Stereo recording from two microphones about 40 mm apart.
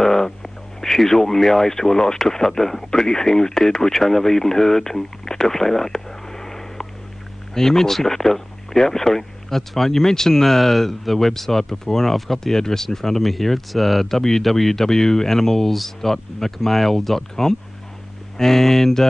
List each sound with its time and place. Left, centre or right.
0.0 s speech: centre